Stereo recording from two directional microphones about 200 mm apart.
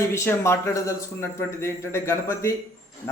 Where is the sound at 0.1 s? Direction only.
15° left (ahead or behind).